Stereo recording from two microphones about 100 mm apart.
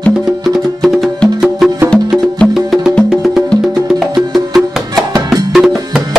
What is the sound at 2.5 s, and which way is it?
Music, 5° right (ahead or behind).